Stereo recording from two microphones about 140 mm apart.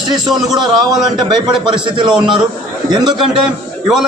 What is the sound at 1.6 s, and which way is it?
A man's voice, 35° right (ahead or behind).